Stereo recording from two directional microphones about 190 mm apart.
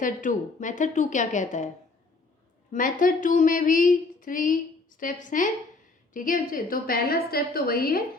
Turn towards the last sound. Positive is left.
turn(degrees=50)  # may be behind; listen again after turning